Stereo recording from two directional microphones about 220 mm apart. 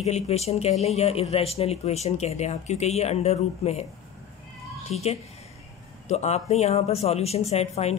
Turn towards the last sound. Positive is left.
turn(degrees=30)  # may be behind; listen again after turning